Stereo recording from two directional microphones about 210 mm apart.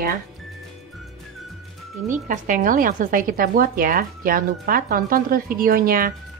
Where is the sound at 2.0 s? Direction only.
40° right (ahead or behind).